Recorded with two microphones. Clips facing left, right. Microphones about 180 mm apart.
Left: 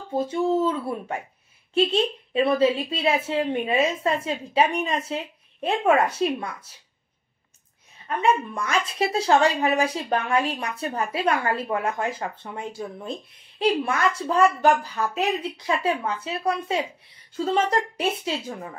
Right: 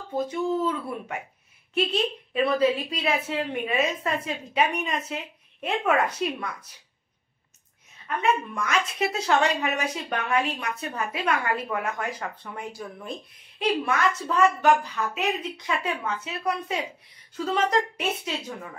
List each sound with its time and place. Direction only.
0.1 s a woman's voice: 30° left (ahead or behind)
8.2 s a woman's voice: 30° left (ahead or behind)